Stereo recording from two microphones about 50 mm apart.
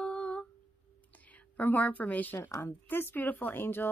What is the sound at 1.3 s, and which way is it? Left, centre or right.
A woman's voice, left.